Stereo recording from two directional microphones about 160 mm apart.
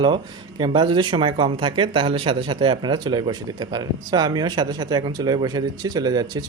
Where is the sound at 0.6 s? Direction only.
30° right (ahead or behind).